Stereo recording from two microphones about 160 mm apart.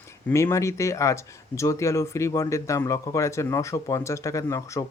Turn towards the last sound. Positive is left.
turn(degrees=20)  # may be behind; listen again after turning